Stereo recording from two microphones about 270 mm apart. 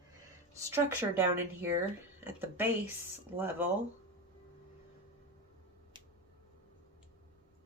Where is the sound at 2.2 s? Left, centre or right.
Centre.